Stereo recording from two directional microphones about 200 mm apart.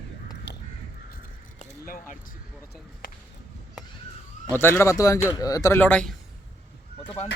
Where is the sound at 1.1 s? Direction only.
40° left (ahead or behind).